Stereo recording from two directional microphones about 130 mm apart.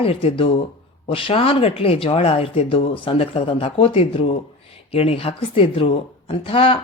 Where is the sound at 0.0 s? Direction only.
50° left (ahead or behind).